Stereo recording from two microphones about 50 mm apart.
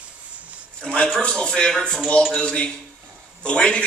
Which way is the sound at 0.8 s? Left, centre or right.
Left.